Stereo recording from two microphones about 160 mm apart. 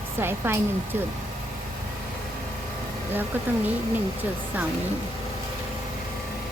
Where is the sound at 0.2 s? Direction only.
15° right (ahead or behind).